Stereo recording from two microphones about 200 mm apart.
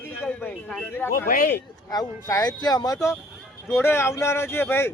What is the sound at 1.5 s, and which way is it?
Speech, 15° left (ahead or behind).